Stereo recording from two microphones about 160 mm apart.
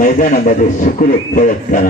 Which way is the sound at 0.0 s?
50° left (ahead or behind).